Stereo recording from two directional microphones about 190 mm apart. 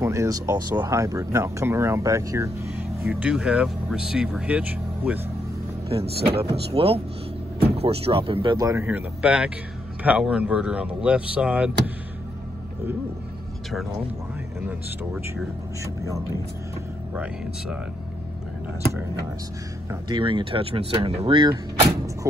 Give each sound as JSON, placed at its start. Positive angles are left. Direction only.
{"t": 0.0, "sound": "speech", "side_deg": -15}
{"t": 6.0, "sound": "speech", "side_deg": -55}
{"t": 6.3, "sound": "speech", "side_deg": -30}
{"t": 14.7, "sound": "speech", "side_deg": -10}
{"t": 17.1, "sound": "speech", "side_deg": -5}
{"t": 20.1, "sound": "speech", "side_deg": -25}
{"t": 22.2, "sound": "speech", "side_deg": -15}